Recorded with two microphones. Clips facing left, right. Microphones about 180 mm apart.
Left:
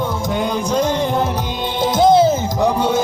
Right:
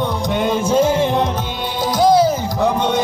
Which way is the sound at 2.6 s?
10° left (ahead or behind).